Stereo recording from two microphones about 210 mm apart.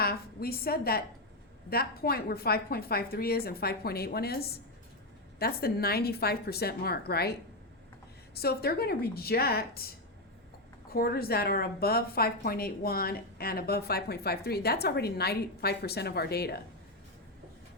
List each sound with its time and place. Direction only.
0.0 s a woman's voice: 45° left (ahead or behind)
8.4 s a woman's voice: 50° left (ahead or behind)
10.9 s a woman's voice: 45° left (ahead or behind)